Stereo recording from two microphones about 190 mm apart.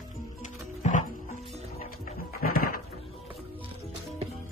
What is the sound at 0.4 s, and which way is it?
Music, 40° left (ahead or behind).